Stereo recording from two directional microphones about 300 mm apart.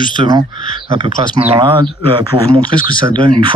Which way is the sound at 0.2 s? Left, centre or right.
Centre.